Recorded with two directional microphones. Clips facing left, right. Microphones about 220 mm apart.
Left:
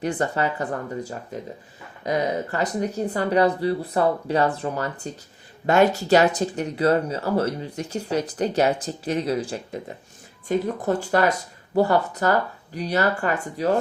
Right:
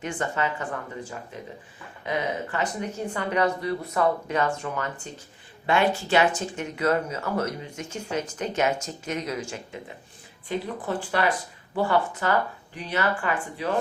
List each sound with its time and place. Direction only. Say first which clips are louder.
0.0 s speech: left 5 dB; 35° left (ahead or behind)